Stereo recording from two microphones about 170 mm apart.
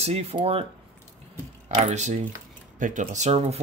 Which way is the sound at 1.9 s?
45° right (ahead or behind).